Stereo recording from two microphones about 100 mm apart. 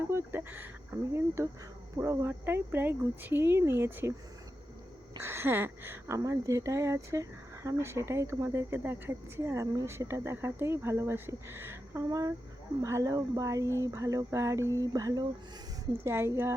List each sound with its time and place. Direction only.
0.1 s a sound: 25° right (ahead or behind)
0.9 s speech: 30° right (ahead or behind)
5.2 s speech: 25° right (ahead or behind)
12.0 s speech: 40° right (ahead or behind)
16.0 s speech: 25° right (ahead or behind)